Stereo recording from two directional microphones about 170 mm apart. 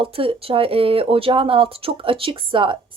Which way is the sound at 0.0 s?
35° right (ahead or behind).